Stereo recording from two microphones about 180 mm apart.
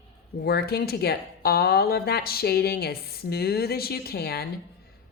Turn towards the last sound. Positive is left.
turn(degrees=60)  # may be behind; listen again after turning